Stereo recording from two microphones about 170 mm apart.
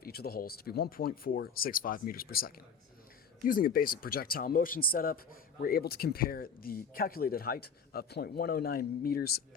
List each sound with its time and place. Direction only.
0.0 s speech: 65° left (ahead or behind)